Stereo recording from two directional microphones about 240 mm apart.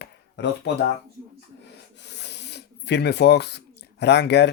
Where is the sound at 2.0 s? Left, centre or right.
Left.